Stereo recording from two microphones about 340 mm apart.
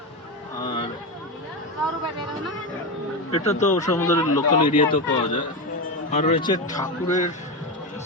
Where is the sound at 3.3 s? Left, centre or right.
Left.